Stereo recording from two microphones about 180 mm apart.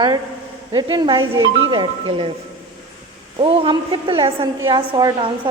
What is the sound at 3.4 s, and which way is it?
A woman's voice, 30° right (ahead or behind).